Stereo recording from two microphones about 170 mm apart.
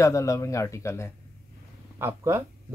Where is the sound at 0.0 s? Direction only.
20° left (ahead or behind).